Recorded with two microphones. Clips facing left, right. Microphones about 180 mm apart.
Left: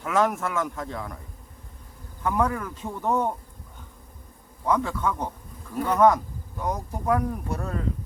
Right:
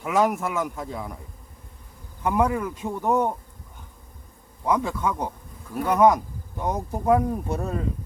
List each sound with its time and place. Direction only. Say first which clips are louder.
0.0 s a man's voice: right 2 dB; 10° right (ahead or behind)
2.2 s a man's voice: right 3 dB; 15° right (ahead or behind)
4.6 s a man's voice: right 1 dB; 15° right (ahead or behind)